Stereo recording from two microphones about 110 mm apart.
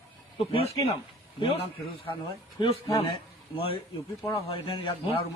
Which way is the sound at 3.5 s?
60° left (ahead or behind).